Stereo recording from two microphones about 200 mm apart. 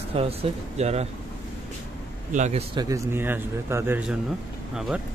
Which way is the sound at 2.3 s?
35° right (ahead or behind).